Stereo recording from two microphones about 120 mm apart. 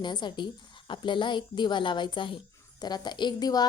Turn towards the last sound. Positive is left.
turn(degrees=35)  # may be behind; listen again after turning